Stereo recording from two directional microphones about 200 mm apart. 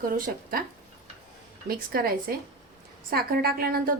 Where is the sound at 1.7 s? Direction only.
45° right (ahead or behind).